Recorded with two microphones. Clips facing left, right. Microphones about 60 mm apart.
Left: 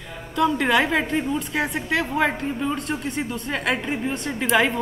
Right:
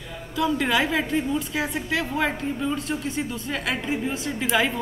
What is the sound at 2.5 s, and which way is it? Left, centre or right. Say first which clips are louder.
Speech: left 1 dB; centre.